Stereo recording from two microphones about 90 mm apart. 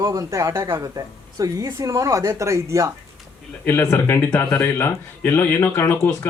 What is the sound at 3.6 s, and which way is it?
Speech, 25° left (ahead or behind).